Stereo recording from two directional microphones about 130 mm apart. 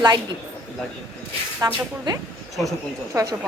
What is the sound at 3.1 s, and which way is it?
Speech, 20° right (ahead or behind).